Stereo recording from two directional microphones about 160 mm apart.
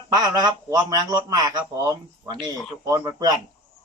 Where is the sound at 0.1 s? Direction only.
25° right (ahead or behind).